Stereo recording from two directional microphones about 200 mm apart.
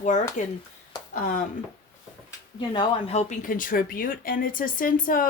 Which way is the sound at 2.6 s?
30° left (ahead or behind).